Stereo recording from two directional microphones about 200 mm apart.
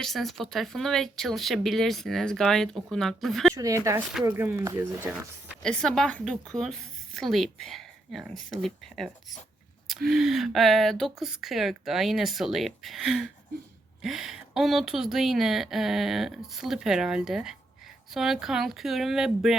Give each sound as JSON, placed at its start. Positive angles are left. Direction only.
{"t": 0.0, "sound": "a woman's voice", "side_deg": 0}
{"t": 3.5, "sound": "speech", "side_deg": -15}
{"t": 5.6, "sound": "a woman's voice", "side_deg": 5}